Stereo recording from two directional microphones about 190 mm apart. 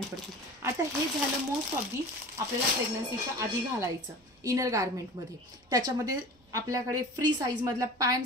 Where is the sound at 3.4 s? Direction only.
15° right (ahead or behind).